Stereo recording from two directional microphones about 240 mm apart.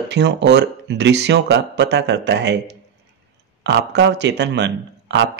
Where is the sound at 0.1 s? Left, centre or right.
Right.